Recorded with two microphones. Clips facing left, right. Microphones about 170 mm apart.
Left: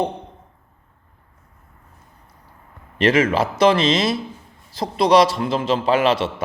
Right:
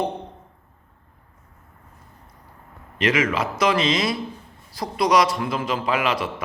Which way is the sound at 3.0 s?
30° left (ahead or behind).